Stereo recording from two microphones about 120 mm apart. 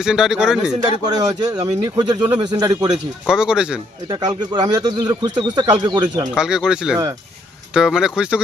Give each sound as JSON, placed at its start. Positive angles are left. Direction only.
{"t": 0.0, "sound": "speech", "side_deg": -5}
{"t": 1.0, "sound": "speech", "side_deg": -35}
{"t": 3.2, "sound": "speech", "side_deg": -5}
{"t": 4.1, "sound": "speech", "side_deg": -35}
{"t": 6.3, "sound": "speech", "side_deg": -5}